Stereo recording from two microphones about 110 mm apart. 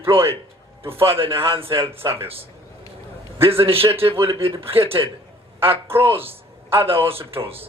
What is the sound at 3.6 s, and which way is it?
A man's voice, 60° right (ahead or behind).